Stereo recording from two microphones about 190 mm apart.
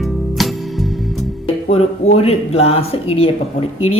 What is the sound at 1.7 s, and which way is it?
A man's voice, 30° left (ahead or behind).